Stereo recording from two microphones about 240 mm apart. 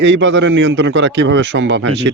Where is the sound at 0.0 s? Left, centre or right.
Right.